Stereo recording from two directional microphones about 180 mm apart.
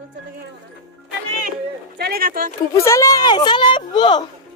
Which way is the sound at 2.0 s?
60° right (ahead or behind).